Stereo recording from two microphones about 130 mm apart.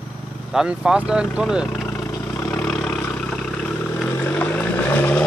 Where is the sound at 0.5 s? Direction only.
5° right (ahead or behind).